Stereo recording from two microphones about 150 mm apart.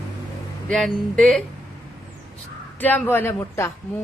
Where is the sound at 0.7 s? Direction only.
5° left (ahead or behind).